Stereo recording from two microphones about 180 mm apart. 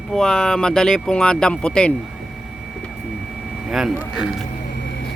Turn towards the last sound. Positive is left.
turn(degrees=-5)  # may be behind; listen again after turning